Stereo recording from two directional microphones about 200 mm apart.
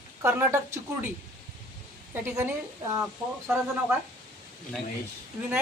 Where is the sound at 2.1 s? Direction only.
15° right (ahead or behind).